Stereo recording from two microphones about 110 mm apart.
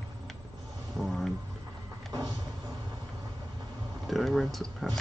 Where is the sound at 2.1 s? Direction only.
35° right (ahead or behind).